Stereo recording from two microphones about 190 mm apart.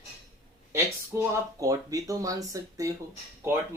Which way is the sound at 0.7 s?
15° right (ahead or behind).